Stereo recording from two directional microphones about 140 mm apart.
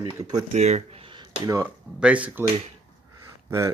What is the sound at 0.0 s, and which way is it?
Speech, 30° right (ahead or behind).